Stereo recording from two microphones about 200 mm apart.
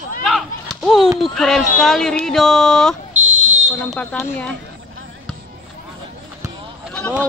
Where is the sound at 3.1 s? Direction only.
35° right (ahead or behind).